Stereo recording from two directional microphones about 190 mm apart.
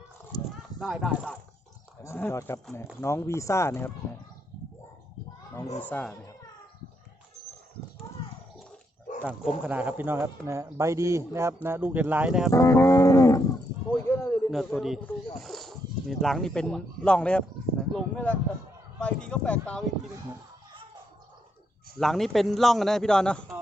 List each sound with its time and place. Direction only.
0.3 s a sound: 20° left (ahead or behind)
0.8 s a man's voice: centre (ahead or behind)
2.0 s speech: 10° left (ahead or behind)
5.8 s speech: 5° left (ahead or behind)
9.2 s speech: 5° right (ahead or behind)
12.5 s speech: 15° left (ahead or behind)
14.1 s a sound: 15° left (ahead or behind)
14.5 s a man's voice: centre (ahead or behind)
21.9 s a man's voice: centre (ahead or behind)